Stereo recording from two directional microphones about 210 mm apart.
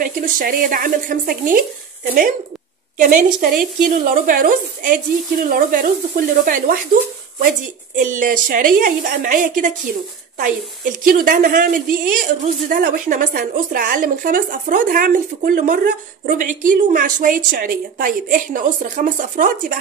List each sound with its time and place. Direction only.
0.0 s a woman's voice: 40° right (ahead or behind)
3.0 s a woman's voice: 40° right (ahead or behind)